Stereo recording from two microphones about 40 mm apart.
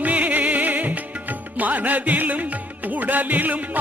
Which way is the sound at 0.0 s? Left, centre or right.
Right.